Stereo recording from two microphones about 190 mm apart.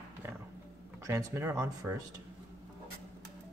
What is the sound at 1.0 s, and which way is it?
Speech, 15° right (ahead or behind).